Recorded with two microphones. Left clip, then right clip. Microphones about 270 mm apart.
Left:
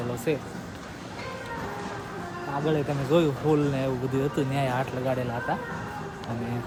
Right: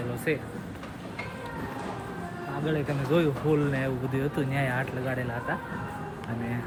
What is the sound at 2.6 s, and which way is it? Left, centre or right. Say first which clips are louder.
Speech: left 2 dB; centre.